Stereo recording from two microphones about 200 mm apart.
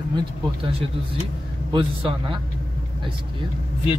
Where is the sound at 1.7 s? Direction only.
25° right (ahead or behind).